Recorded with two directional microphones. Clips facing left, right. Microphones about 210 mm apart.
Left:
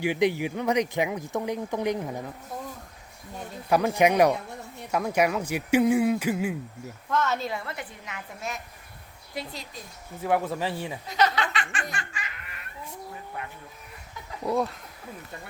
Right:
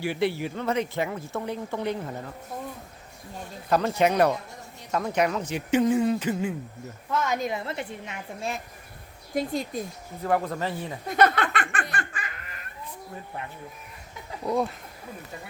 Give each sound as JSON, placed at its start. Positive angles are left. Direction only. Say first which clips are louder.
{"t": 0.0, "sound": "speech", "louder": "left 2 dB", "side_deg": 15}
{"t": 3.7, "sound": "speech", "louder": "left 1 dB", "side_deg": 10}
{"t": 7.1, "sound": "a woman's voice", "louder": "even", "side_deg": -10}
{"t": 9.3, "sound": "speech", "louder": "right 9 dB", "side_deg": -50}
{"t": 10.2, "sound": "speech", "louder": "even", "side_deg": 5}
{"t": 11.0, "sound": "snicker", "louder": "right 4 dB", "side_deg": -55}
{"t": 14.4, "sound": "speech", "louder": "even", "side_deg": 0}